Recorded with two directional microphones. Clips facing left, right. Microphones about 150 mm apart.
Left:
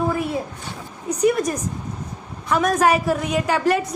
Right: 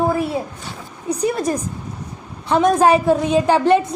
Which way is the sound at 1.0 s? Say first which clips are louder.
Left 1 dB; 30° right (ahead or behind).